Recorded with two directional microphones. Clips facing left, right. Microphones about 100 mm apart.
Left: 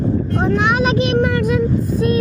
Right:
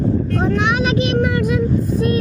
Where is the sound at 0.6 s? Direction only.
40° left (ahead or behind).